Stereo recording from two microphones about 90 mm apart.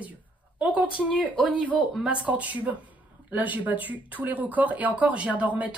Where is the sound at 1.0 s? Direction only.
5° right (ahead or behind).